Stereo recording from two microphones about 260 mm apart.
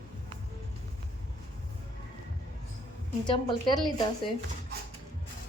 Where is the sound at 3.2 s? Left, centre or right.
Centre.